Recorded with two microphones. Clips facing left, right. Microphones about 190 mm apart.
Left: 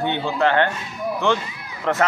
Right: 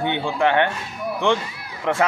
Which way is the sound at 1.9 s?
15° right (ahead or behind).